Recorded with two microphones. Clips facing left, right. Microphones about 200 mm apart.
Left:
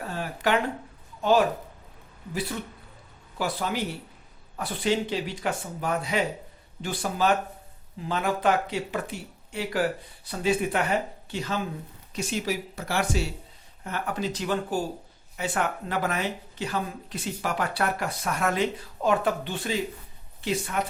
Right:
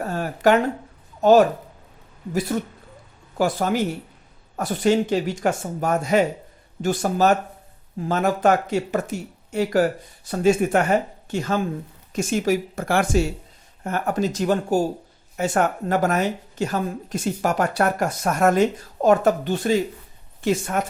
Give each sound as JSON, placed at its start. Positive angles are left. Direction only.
{"t": 0.0, "sound": "a woman's voice", "side_deg": -45}
{"t": 2.5, "sound": "a woman's voice", "side_deg": -45}